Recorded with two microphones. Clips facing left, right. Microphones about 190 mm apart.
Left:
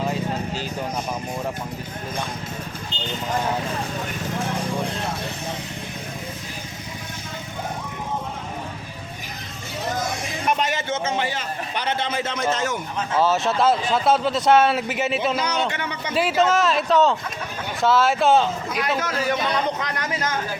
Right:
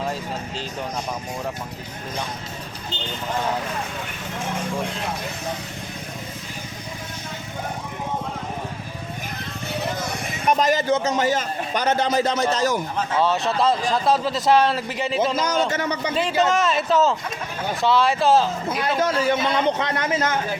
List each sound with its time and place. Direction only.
0.0 s music: centre (ahead or behind)
10.6 s a man's voice: 40° right (ahead or behind)
13.1 s speech: centre (ahead or behind)
15.7 s a man's voice: 40° right (ahead or behind)
16.1 s speech: 5° left (ahead or behind)
18.8 s a man's voice: 30° right (ahead or behind)